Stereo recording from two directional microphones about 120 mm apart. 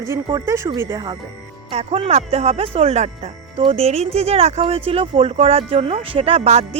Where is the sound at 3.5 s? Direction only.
50° right (ahead or behind).